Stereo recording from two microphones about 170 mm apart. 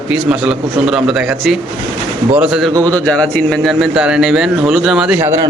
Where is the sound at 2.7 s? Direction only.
20° right (ahead or behind).